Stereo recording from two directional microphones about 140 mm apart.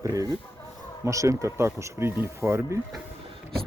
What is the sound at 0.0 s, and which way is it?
Speech, 25° right (ahead or behind).